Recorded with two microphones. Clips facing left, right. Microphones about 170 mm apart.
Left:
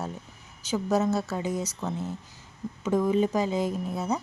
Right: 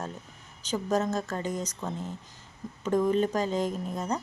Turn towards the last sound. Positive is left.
turn(degrees=5)  # may be behind; listen again after turning